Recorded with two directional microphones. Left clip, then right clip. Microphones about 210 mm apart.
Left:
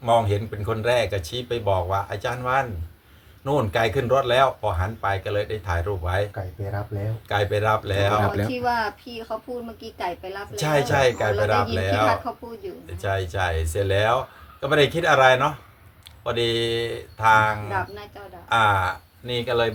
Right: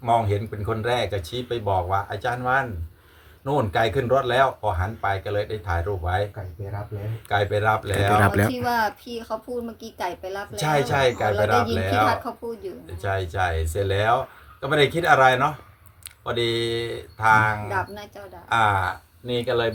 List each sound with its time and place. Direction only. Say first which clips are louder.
0.0 s speech: left 1 dB; 10° right (ahead or behind)
7.3 s speech: right 1 dB; 5° right (ahead or behind)
8.2 s speech: right 4 dB; 35° right (ahead or behind)
8.6 s a woman's voice: right 1 dB; 55° right (ahead or behind)
10.6 s speech: left 1 dB; centre (ahead or behind)
17.7 s a woman's voice: even; 55° right (ahead or behind)
18.5 s speech: left 1 dB; 5° right (ahead or behind)